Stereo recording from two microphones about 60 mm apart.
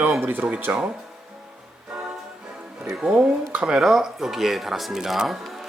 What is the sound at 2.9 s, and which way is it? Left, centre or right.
Speech, centre.